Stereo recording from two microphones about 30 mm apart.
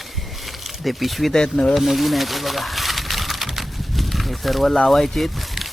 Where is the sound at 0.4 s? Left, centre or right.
Centre.